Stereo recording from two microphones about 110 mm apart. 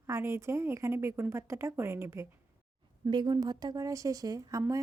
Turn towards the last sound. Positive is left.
turn(degrees=-30)  # may be behind; listen again after turning